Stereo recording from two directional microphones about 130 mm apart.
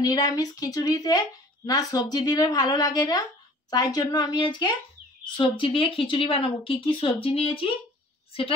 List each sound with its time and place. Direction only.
0.0 s a woman's voice: 30° left (ahead or behind); by 8.5 s 45° left (ahead or behind)